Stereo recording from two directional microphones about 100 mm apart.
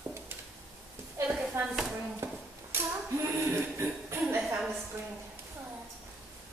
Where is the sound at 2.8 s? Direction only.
25° right (ahead or behind).